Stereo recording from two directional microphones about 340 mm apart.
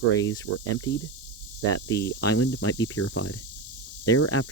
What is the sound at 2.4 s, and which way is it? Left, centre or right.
Speech, left.